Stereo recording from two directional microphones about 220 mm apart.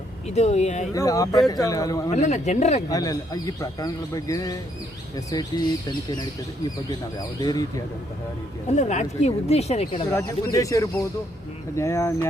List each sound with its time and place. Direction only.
0.3 s speech: 30° left (ahead or behind)
0.9 s a man's voice: 15° left (ahead or behind)
2.0 s speech: 30° left (ahead or behind)
2.9 s a man's voice: 15° left (ahead or behind)
7.2 s a man's voice: 15° left (ahead or behind)
8.7 s speech: 30° left (ahead or behind)
10.1 s a man's voice: 15° left (ahead or behind)